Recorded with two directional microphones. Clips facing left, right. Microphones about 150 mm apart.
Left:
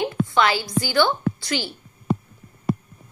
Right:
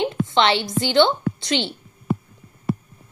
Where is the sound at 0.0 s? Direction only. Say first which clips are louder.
Right 1 dB; 25° right (ahead or behind).